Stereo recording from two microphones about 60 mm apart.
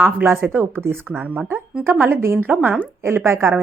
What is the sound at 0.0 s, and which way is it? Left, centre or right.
Speech, right.